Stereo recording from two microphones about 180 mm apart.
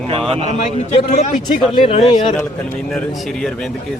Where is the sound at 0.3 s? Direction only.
35° right (ahead or behind).